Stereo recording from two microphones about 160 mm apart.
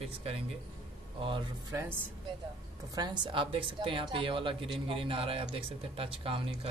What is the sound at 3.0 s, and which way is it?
Speech, 30° right (ahead or behind).